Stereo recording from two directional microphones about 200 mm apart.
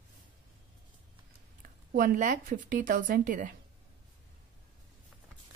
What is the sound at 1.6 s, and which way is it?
Speech, 40° right (ahead or behind).